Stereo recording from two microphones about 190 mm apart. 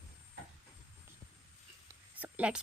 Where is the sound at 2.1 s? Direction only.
10° right (ahead or behind).